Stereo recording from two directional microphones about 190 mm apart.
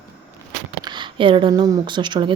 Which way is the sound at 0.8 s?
25° right (ahead or behind).